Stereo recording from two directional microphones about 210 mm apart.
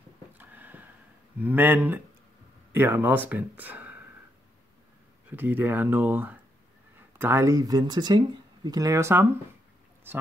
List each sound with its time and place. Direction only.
0.4 s a sound: 10° right (ahead or behind)
1.4 s speech: 10° right (ahead or behind)
5.3 s speech: 10° right (ahead or behind)